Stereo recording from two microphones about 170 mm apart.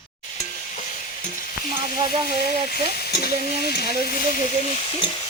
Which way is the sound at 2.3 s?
65° left (ahead or behind).